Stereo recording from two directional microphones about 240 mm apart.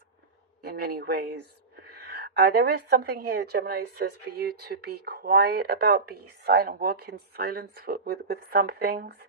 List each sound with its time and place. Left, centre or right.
0.6 s a woman's voice: right